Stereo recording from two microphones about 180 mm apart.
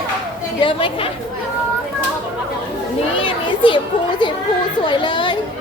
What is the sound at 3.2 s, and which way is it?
Children playing, 30° left (ahead or behind).